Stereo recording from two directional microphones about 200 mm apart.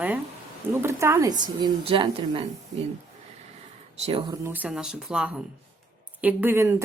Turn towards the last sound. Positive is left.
turn(degrees=-10)  # may be behind; listen again after turning